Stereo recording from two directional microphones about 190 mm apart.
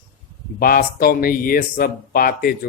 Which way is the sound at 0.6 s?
50° left (ahead or behind).